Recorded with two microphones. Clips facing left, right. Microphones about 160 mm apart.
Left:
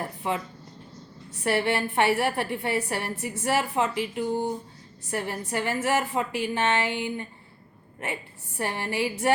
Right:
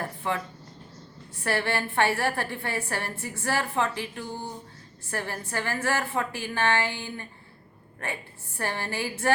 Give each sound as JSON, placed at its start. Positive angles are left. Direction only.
{"t": 0.2, "sound": "speech", "side_deg": 20}
{"t": 1.5, "sound": "a woman's voice", "side_deg": 15}